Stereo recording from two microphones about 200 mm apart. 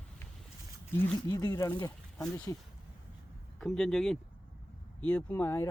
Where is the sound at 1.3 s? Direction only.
15° left (ahead or behind).